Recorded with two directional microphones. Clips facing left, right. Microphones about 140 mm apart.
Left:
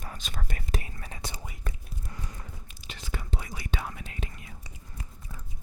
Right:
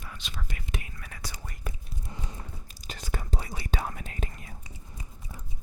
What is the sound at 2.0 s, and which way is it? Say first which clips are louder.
Horse: right 1 dB; 20° right (ahead or behind).